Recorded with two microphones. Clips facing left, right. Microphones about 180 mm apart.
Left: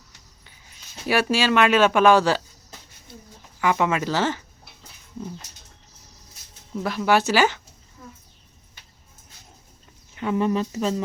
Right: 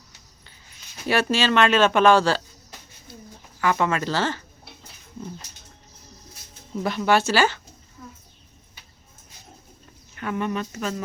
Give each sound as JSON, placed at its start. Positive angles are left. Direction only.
{"t": 1.0, "sound": "speech", "side_deg": 10}
{"t": 3.6, "sound": "speech", "side_deg": 15}
{"t": 6.8, "sound": "speech", "side_deg": 5}
{"t": 10.2, "sound": "speech", "side_deg": 25}